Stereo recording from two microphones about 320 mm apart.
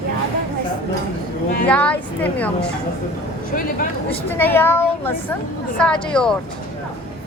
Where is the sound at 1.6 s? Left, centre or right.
Centre.